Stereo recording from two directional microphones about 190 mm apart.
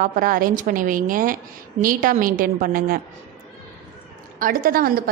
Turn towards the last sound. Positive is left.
turn(degrees=-50)  # may be behind; listen again after turning